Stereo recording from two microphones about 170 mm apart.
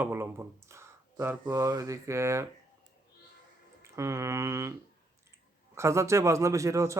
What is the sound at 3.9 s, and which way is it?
A man's voice, 15° right (ahead or behind).